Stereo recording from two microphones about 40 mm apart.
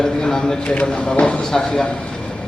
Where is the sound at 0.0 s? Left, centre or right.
Centre.